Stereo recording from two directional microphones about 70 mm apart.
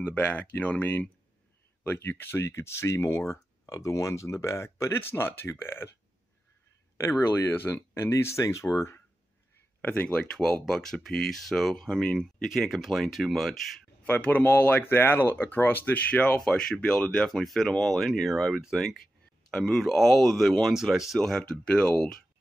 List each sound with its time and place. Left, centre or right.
0.0 s speech: left
5.5 s speech: left
7.0 s speech: left
9.8 s a sound: left
10.3 s speech: centre
14.0 s speech: left; by 20.7 s centre
20.7 s speech: centre
21.2 s speech: centre